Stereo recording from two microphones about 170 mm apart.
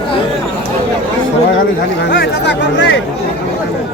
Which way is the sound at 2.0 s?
85° left.